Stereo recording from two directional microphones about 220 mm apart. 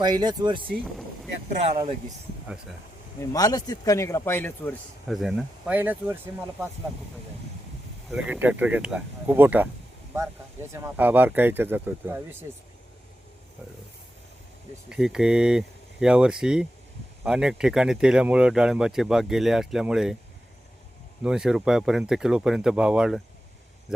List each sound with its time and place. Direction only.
0.0 s speech: 20° right (ahead or behind)
3.2 s a man's voice: 15° left (ahead or behind); by 6.7 s 10° right (ahead or behind)
8.1 s speech: 5° right (ahead or behind)
14.8 s speech: 5° right (ahead or behind)
21.2 s speech: 5° right (ahead or behind)